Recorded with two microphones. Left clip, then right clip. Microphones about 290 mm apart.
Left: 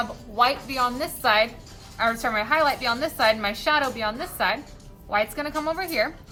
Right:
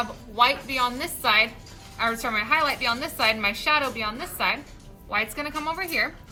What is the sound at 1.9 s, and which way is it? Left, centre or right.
A woman's voice, right.